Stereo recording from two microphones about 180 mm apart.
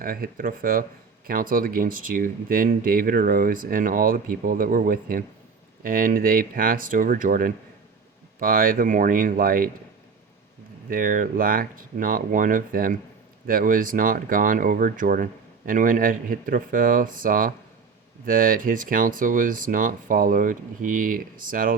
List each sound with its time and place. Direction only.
0.0 s speech: 50° right (ahead or behind)
10.8 s speech: 50° right (ahead or behind)